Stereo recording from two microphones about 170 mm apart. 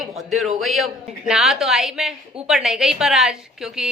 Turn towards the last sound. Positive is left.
turn(degrees=-5)  # may be behind; listen again after turning